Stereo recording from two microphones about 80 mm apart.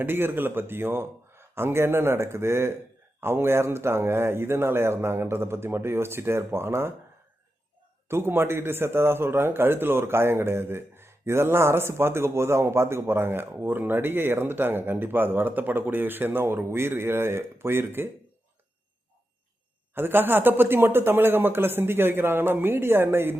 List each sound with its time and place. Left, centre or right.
0.0 s a man's voice: right
8.0 s a man's voice: right
19.9 s a man's voice: right